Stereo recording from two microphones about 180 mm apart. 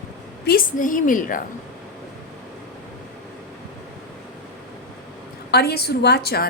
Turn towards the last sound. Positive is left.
turn(degrees=60)  # may be behind; listen again after turning